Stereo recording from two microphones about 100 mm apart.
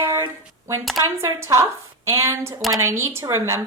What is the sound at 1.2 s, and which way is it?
A woman's voice, 30° right (ahead or behind).